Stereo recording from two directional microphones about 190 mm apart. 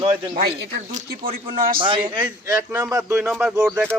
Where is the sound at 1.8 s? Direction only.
25° right (ahead or behind).